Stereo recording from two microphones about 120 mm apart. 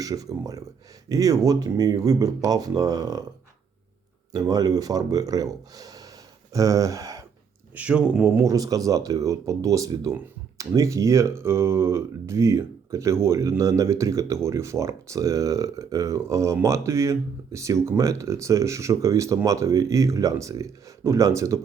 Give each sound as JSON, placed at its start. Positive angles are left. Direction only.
{"t": 0.0, "sound": "speech", "side_deg": -30}
{"t": 4.3, "sound": "speech", "side_deg": -30}
{"t": 7.8, "sound": "speech", "side_deg": -10}
{"t": 8.4, "sound": "speech", "side_deg": -30}